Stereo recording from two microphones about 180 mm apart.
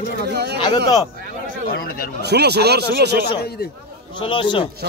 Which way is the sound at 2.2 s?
65° right (ahead or behind).